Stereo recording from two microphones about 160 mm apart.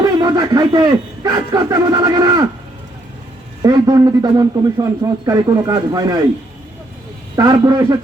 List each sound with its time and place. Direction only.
0.2 s a man's voice: 25° right (ahead or behind)
3.6 s a man's voice: 25° right (ahead or behind)
7.3 s a man's voice: 20° right (ahead or behind)